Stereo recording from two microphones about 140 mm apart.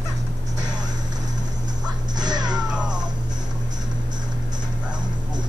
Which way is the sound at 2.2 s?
30° right (ahead or behind).